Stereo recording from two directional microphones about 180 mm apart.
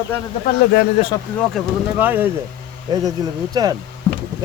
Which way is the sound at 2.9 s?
20° right (ahead or behind).